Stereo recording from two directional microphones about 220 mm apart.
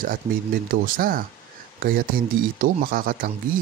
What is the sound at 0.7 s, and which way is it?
Speech, 40° right (ahead or behind).